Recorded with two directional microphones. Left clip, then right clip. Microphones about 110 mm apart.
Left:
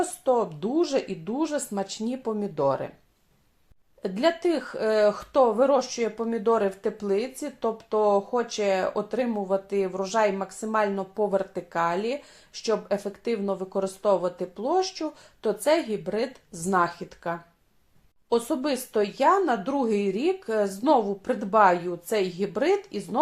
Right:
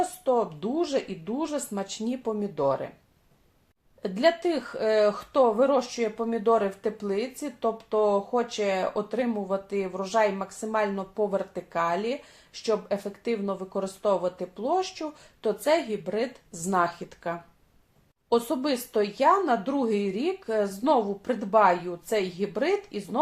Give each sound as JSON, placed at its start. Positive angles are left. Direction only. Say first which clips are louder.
{"t": 0.0, "sound": "speech", "louder": "left 1 dB", "side_deg": 40}
{"t": 4.0, "sound": "speech", "louder": "even", "side_deg": 30}